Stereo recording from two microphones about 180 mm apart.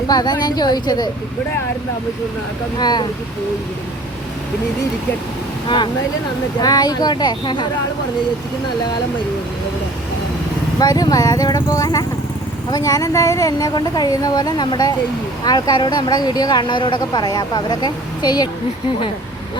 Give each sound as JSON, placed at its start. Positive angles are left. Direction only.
{"t": 0.1, "sound": "speech", "side_deg": 20}
{"t": 2.7, "sound": "speech", "side_deg": 25}
{"t": 5.6, "sound": "speech", "side_deg": 25}
{"t": 10.8, "sound": "speech", "side_deg": 20}